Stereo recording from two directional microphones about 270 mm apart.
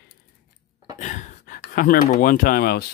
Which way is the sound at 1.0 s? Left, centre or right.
Left.